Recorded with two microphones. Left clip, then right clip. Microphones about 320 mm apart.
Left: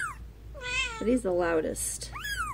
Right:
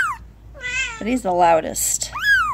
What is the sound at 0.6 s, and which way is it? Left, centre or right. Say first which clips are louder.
Cat: right 7 dB; centre.